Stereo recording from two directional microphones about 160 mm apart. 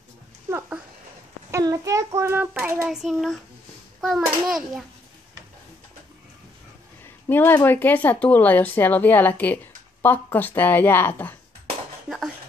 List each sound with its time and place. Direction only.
0.5 s a sound: 15° right (ahead or behind)
1.5 s a child's voice: 20° right (ahead or behind)
2.6 s child singing: 15° right (ahead or behind)
2.9 s a child's voice: centre (ahead or behind)
7.2 s speech: 10° left (ahead or behind)
12.1 s a sound: 5° right (ahead or behind)